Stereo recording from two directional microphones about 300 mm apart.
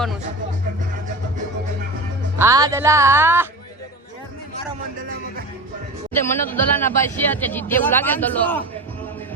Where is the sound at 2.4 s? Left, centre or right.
Centre.